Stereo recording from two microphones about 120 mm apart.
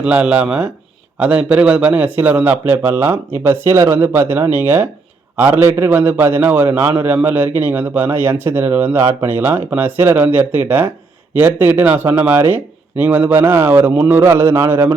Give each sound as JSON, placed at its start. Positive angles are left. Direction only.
{"t": 0.0, "sound": "speech", "side_deg": -10}